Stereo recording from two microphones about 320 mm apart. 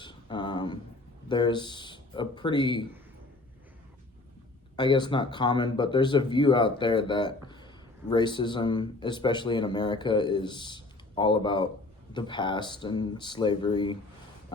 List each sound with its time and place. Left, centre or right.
0.0 s a sound: centre
1.3 s speech: centre
4.8 s speech: centre